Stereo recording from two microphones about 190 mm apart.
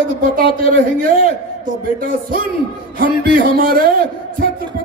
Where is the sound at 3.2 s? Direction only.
50° right (ahead or behind).